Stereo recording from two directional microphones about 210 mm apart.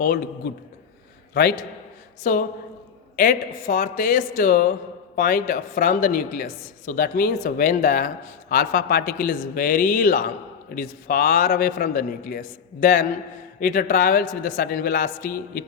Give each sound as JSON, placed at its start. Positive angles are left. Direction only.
{"t": 0.0, "sound": "a man's voice", "side_deg": 45}